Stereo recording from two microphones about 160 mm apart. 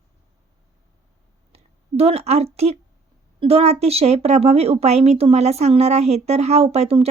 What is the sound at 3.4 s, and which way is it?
A woman's voice, 40° right (ahead or behind).